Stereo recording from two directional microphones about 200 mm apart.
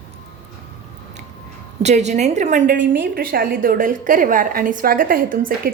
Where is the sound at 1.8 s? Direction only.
35° right (ahead or behind).